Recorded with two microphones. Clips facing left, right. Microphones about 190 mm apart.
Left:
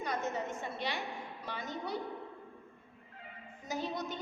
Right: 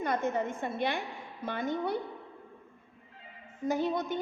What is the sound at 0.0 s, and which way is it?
A woman's voice, 55° right (ahead or behind).